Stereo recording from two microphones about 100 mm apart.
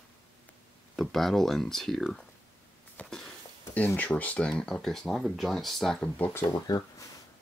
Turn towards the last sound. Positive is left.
turn(degrees=40)  # may be behind; listen again after turning